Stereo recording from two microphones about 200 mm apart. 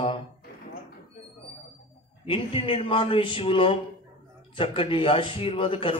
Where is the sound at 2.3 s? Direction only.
25° left (ahead or behind).